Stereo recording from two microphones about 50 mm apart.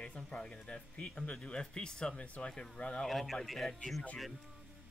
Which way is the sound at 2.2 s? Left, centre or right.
Left.